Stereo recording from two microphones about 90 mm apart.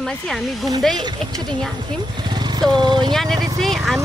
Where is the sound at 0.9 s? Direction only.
50° right (ahead or behind).